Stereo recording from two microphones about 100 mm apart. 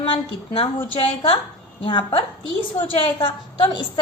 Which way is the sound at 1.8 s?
55° left (ahead or behind).